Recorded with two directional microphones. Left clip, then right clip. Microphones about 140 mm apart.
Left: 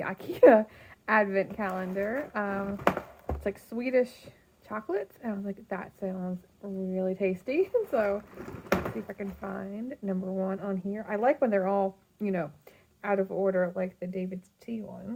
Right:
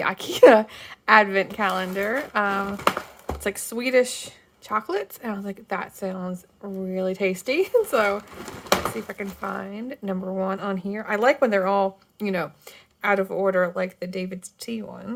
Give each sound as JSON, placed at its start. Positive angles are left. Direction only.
{"t": 0.0, "sound": "a woman's voice", "side_deg": -20}